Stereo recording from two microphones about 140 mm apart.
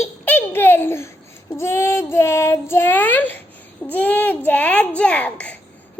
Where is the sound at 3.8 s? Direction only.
15° left (ahead or behind).